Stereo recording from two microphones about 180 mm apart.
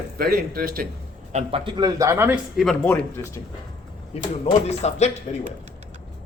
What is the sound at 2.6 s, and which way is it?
Speech, 5° left (ahead or behind).